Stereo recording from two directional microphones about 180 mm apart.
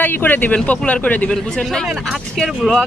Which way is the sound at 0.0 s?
10° left (ahead or behind).